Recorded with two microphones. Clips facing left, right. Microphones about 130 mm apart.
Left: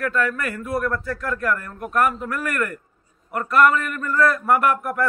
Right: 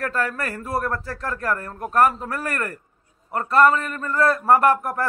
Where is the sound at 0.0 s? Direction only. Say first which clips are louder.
Left 2 dB; 35° right (ahead or behind).